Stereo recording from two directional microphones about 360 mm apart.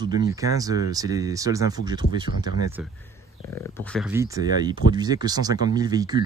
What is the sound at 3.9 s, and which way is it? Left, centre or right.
Speech, centre.